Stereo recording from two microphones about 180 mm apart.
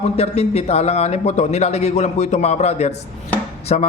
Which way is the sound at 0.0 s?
35° left (ahead or behind).